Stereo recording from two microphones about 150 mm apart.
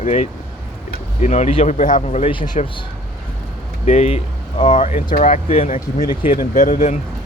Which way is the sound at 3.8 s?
50° left (ahead or behind).